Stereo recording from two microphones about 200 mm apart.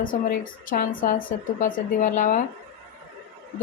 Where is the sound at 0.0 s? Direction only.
45° left (ahead or behind).